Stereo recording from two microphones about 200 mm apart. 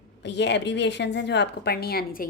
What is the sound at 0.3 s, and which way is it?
A woman's voice, 60° left (ahead or behind).